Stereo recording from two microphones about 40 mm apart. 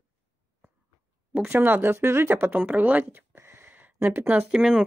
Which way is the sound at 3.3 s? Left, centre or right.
Right.